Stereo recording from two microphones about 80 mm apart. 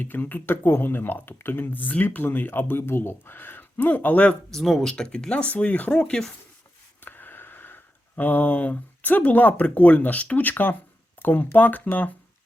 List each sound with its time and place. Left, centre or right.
0.0 s speech: left
4.5 s speech: centre
7.0 s speech: left